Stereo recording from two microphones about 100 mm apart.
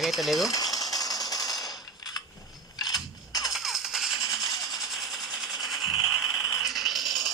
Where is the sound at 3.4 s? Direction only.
Centre (ahead or behind).